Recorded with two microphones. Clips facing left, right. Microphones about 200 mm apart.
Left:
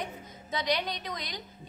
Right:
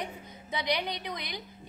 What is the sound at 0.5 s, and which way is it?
Speech, 10° right (ahead or behind).